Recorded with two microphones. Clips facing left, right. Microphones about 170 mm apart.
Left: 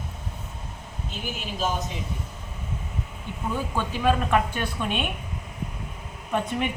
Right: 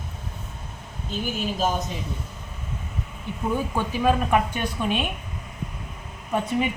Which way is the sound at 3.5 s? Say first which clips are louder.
Right 2 dB; 15° right (ahead or behind).